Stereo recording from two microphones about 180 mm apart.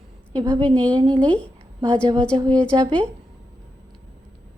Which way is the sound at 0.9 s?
25° right (ahead or behind).